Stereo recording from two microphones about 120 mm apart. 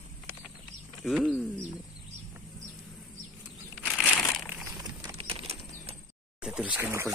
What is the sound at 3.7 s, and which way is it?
Crumpling, 10° left (ahead or behind).